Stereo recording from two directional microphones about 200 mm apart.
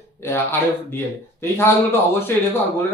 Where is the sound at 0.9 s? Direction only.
10° left (ahead or behind).